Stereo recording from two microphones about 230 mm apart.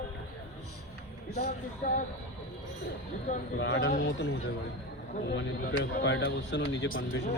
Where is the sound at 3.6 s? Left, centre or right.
Left.